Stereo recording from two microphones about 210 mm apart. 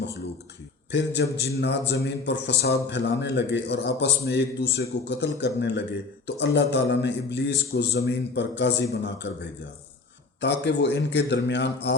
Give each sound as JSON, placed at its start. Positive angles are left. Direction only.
{"t": 0.9, "sound": "a man's voice", "side_deg": 55}